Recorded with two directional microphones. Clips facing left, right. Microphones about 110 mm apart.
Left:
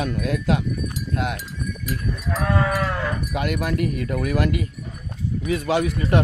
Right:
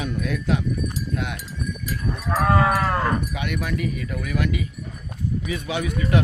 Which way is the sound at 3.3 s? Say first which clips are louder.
Left 3 dB; 55° left (ahead or behind).